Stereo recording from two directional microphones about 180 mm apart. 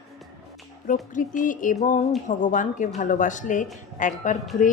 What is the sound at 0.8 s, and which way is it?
A woman's voice, 45° left (ahead or behind).